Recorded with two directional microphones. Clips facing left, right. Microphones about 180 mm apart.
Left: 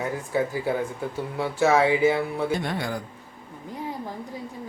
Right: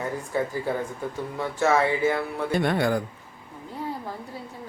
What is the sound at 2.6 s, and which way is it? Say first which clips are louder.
Speech: right 6 dB; 60° right (ahead or behind).